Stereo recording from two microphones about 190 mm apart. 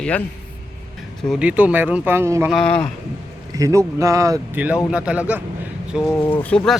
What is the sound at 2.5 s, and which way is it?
Speech, 5° left (ahead or behind).